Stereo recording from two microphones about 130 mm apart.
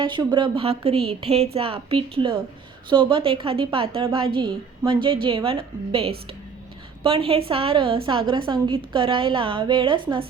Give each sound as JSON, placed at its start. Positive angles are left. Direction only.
{"t": 0.0, "sound": "a woman's voice", "side_deg": -35}